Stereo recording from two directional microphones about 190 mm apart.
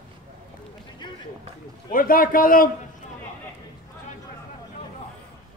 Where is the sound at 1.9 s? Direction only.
50° left (ahead or behind).